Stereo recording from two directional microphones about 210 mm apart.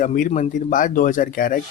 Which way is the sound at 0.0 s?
40° left (ahead or behind).